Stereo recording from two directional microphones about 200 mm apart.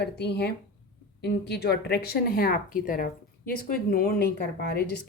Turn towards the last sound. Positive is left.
turn(degrees=50)  # may be behind; listen again after turning